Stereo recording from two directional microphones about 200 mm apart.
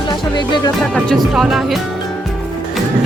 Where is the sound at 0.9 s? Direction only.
Centre (ahead or behind).